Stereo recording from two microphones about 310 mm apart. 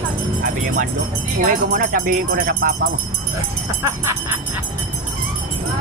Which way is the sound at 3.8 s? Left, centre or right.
Centre.